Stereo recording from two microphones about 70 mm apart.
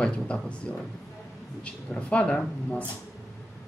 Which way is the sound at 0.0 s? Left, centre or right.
Centre.